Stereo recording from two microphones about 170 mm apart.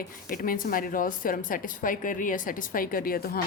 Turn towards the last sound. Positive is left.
turn(degrees=60)  # may be behind; listen again after turning